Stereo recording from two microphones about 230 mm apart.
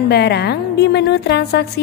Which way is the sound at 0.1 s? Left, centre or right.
Left.